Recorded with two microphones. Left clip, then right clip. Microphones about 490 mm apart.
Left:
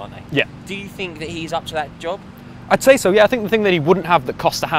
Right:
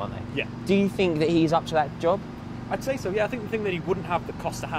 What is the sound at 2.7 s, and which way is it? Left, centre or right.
Speech, left.